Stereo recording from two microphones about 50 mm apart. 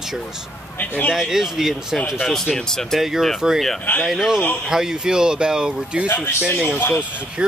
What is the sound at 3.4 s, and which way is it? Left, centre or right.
Speech, centre.